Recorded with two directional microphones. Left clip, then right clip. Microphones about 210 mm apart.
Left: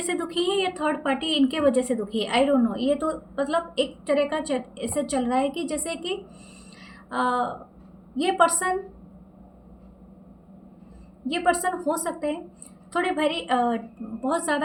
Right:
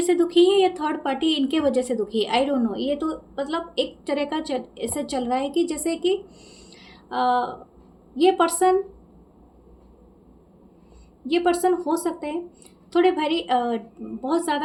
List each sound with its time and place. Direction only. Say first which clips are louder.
0.0 s a woman's voice: right 8 dB; 25° right (ahead or behind)
11.3 s a woman's voice: right 3 dB; 25° right (ahead or behind)